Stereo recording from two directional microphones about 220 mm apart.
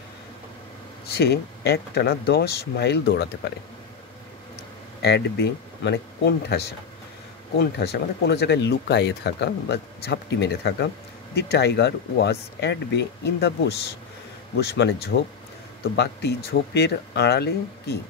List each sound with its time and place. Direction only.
1.0 s speech: 45° left (ahead or behind)
5.0 s speech: 50° left (ahead or behind)
14.8 s speech: 50° left (ahead or behind)